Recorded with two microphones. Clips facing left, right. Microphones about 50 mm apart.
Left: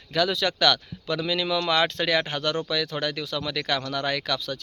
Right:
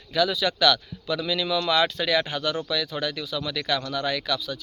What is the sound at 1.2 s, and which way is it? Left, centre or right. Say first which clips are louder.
Speech: left 1 dB; left.